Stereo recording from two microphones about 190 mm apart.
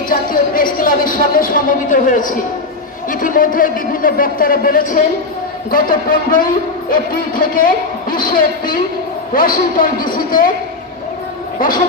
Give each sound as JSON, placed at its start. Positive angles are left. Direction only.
{"t": 0.1, "sound": "music", "side_deg": 50}
{"t": 0.7, "sound": "a man's voice", "side_deg": 50}